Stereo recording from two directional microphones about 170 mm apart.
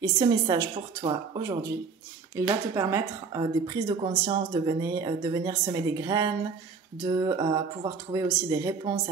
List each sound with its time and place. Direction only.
0.0 s a woman's voice: 25° right (ahead or behind)